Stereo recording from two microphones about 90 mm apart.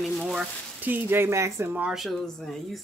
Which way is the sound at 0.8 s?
20° right (ahead or behind).